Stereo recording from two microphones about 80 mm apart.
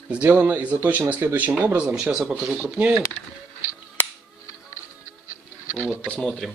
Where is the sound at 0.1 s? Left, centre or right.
Centre.